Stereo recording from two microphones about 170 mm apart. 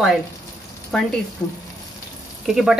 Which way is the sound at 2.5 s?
Centre (ahead or behind).